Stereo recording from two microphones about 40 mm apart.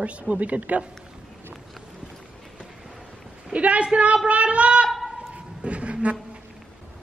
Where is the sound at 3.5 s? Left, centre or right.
Right.